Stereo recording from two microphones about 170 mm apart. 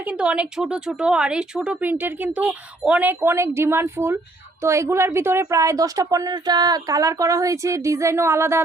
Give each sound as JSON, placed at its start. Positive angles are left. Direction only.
{"t": 0.0, "sound": "a woman's voice", "side_deg": -5}